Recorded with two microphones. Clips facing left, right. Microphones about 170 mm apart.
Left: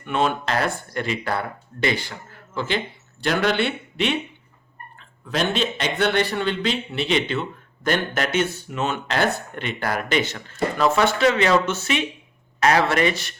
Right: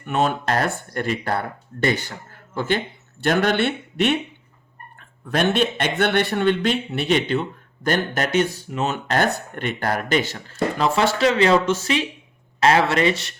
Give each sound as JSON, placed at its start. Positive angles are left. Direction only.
{"t": 0.0, "sound": "a man's voice", "side_deg": -45}